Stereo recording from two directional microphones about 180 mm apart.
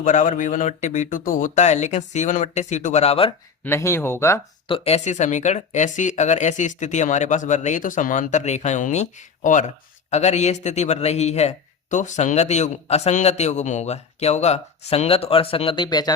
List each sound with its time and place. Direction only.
0.0 s speech: 45° left (ahead or behind)
3.6 s speech: 15° left (ahead or behind)
4.7 s speech: 35° left (ahead or behind)